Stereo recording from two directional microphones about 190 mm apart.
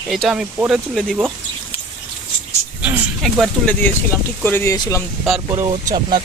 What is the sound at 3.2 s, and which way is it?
A man's voice, 5° left (ahead or behind).